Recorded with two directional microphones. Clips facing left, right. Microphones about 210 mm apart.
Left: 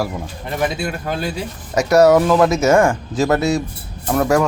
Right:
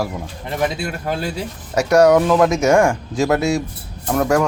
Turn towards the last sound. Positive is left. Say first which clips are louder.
# left 1 dB
turn(degrees=5)  # may be behind; listen again after turning